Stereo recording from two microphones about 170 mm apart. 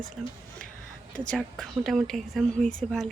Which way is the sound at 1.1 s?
5° left (ahead or behind).